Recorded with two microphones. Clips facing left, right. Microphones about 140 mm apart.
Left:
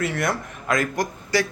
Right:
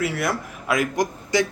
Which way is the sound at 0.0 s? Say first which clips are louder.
Even; 5° right (ahead or behind).